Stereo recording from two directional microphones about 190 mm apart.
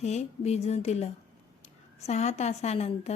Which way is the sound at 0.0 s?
35° left (ahead or behind).